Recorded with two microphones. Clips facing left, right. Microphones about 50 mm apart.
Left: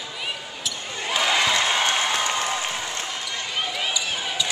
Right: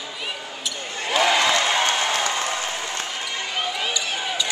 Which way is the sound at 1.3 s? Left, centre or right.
Centre.